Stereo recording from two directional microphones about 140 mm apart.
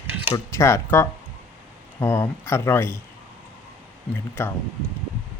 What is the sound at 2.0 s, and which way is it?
Speech, 15° left (ahead or behind).